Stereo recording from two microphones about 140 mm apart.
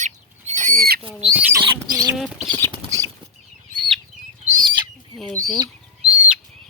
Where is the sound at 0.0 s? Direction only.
60° right (ahead or behind); by 1.0 s 90° right.